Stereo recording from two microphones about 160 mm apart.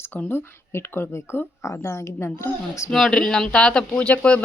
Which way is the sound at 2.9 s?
5° left (ahead or behind).